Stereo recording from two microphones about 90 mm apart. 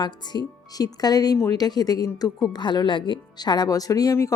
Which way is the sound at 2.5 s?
55° left (ahead or behind).